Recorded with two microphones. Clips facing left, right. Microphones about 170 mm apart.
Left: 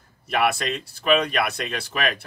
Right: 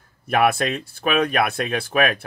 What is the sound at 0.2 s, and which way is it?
Speech, 50° right (ahead or behind).